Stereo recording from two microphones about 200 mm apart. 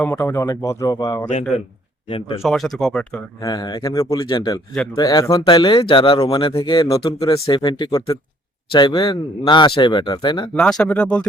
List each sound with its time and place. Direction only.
0.0 s speech: 10° left (ahead or behind)
1.3 s speech: 30° left (ahead or behind)
2.4 s speech: centre (ahead or behind)
3.4 s speech: 20° left (ahead or behind)
10.5 s speech: 5° left (ahead or behind)